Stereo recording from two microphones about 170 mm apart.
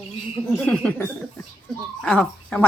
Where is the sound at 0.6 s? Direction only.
5° left (ahead or behind).